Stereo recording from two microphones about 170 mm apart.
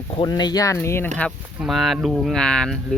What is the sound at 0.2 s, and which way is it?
Speech, 25° left (ahead or behind).